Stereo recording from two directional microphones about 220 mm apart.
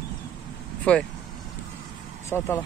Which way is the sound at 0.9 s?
5° left (ahead or behind).